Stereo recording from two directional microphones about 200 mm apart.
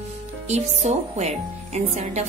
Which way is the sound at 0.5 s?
35° right (ahead or behind).